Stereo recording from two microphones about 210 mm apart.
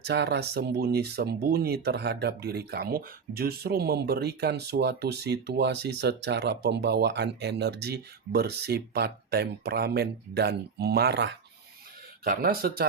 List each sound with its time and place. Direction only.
0.0 s speech: 55° right (ahead or behind)